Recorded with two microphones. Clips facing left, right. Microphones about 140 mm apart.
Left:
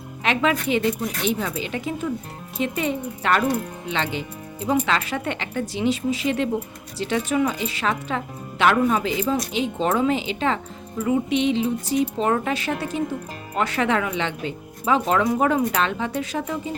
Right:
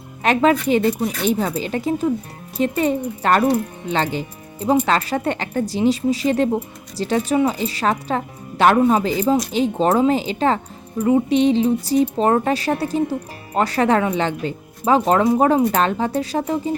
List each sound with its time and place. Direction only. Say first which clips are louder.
0.2 s speech: right 6 dB; 40° right (ahead or behind)
8.8 s speech: right 5 dB; 25° right (ahead or behind)
9.0 s speech: right 5 dB; 40° right (ahead or behind)